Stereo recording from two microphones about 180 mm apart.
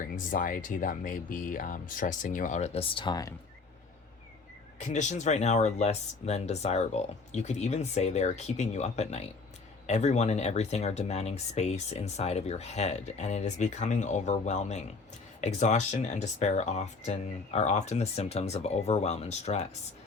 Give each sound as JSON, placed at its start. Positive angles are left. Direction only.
{"t": 0.3, "sound": "speech", "side_deg": 50}
{"t": 4.8, "sound": "speech", "side_deg": 40}